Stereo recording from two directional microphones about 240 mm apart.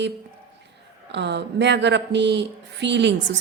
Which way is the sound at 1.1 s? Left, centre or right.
Right.